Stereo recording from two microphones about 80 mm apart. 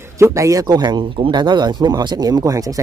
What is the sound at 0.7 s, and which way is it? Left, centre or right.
Speech, right.